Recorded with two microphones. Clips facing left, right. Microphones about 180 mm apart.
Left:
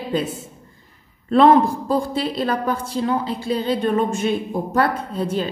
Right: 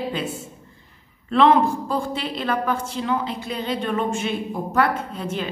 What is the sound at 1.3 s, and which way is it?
A woman's voice, 40° left (ahead or behind).